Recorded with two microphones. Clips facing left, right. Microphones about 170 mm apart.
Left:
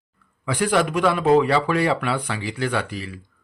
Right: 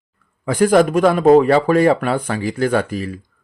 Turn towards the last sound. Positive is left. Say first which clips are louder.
# right 7 dB
turn(degrees=-45)  # may be behind; listen again after turning